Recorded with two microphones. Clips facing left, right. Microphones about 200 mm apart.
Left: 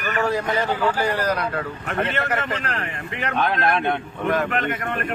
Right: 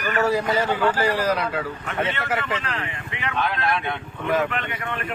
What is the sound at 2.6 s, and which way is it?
Speech, 45° left (ahead or behind).